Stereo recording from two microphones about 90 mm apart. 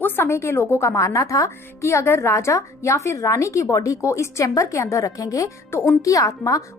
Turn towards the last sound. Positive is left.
turn(degrees=40)  # may be behind; listen again after turning